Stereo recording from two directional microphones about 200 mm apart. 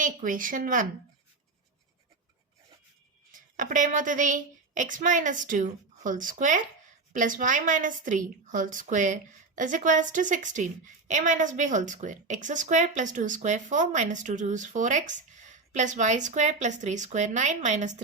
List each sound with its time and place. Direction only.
0.0 s speech: 40° right (ahead or behind)
3.3 s a woman's voice: 40° right (ahead or behind)